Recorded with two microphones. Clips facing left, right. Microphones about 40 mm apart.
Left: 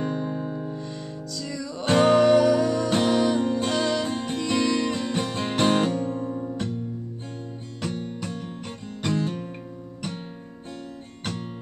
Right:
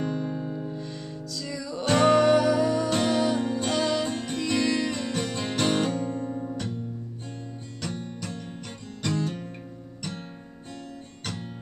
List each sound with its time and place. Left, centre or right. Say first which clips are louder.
0.0 s music: left 2 dB; left
0.7 s music: left 2 dB; centre
1.9 s music: left 2 dB; centre
3.0 s music: left 3 dB; centre
4.1 s music: left 3 dB; centre
4.4 s music: left 1 dB; centre
5.9 s guitar: left 2 dB; centre
7.8 s music: left 4 dB; left